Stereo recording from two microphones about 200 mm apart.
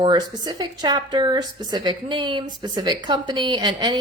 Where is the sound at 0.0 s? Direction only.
20° right (ahead or behind).